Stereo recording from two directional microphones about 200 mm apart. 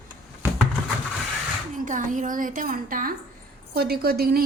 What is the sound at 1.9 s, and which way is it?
A woman's voice, 40° right (ahead or behind).